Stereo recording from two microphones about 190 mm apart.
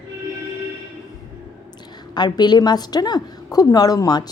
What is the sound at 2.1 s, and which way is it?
A woman's voice, 20° left (ahead or behind).